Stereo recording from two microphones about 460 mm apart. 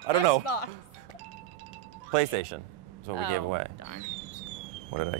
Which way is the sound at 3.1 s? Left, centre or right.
Left.